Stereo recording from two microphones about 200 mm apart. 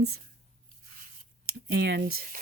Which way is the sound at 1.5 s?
50° right (ahead or behind).